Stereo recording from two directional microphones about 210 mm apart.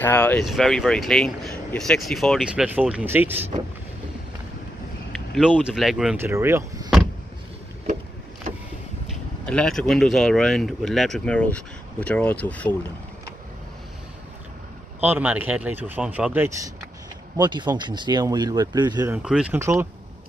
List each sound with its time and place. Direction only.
0.0 s speech: 10° left (ahead or behind); by 3.4 s 10° right (ahead or behind)
5.1 s speech: centre (ahead or behind)
9.5 s speech: 5° left (ahead or behind)
15.0 s speech: 10° right (ahead or behind)
19.1 s speech: 5° right (ahead or behind)